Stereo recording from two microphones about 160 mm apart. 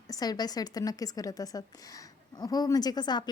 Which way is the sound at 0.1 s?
25° left (ahead or behind).